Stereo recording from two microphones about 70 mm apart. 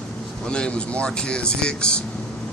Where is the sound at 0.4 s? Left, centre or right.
Centre.